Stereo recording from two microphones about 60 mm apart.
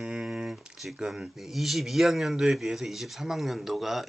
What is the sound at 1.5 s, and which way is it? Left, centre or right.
Speech, centre.